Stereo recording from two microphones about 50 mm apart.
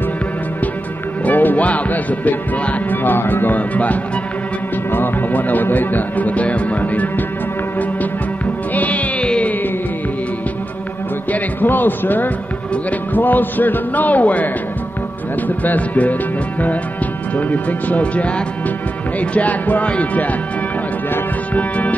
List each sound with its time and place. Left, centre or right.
1.2 s music: left
4.9 s speech: left
8.7 s music: left
11.3 s speech: left
17.4 s speech: left
21.5 s speech: left